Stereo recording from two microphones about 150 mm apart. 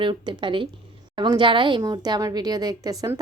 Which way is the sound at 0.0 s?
30° right (ahead or behind).